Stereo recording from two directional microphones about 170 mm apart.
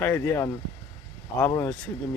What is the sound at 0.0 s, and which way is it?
Speech, 15° left (ahead or behind).